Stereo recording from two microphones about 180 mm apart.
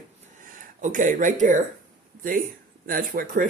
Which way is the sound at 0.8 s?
45° right (ahead or behind).